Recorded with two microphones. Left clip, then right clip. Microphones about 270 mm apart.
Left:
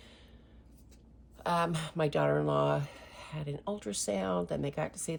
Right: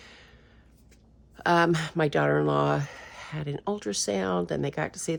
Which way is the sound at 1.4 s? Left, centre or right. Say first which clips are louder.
Right 8 dB; right.